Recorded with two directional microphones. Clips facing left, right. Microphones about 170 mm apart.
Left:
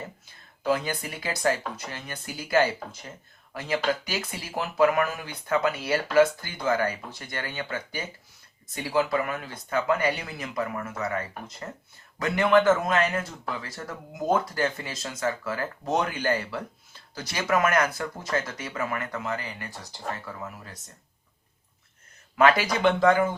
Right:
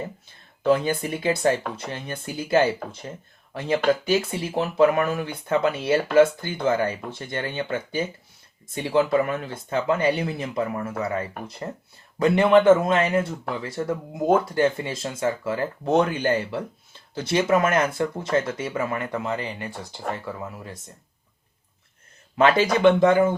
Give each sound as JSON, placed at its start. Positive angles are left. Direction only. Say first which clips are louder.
{"t": 0.7, "sound": "speech", "louder": "right 6 dB", "side_deg": -25}
{"t": 22.4, "sound": "speech", "louder": "right 3 dB", "side_deg": -25}